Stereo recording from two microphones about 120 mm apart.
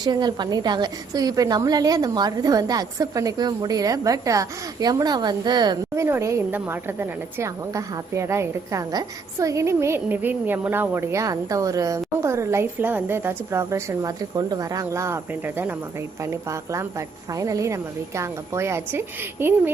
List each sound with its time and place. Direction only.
0.0 s a woman's voice: 35° right (ahead or behind)
6.0 s a woman's voice: 25° right (ahead or behind)